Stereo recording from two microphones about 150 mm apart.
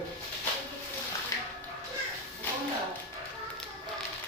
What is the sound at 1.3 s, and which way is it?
Music, 25° left (ahead or behind).